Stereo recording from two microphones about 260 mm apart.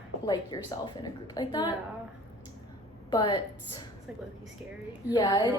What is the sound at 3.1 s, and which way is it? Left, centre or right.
Speech, centre.